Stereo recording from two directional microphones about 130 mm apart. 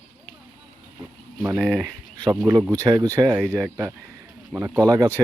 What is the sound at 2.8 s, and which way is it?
Speech, 30° right (ahead or behind).